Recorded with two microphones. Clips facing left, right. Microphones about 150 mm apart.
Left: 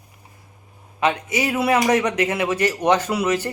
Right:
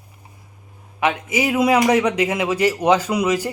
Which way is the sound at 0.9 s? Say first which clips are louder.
Right 1 dB; 5° right (ahead or behind).